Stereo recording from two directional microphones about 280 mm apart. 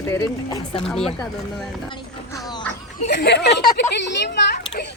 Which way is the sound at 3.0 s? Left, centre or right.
Left.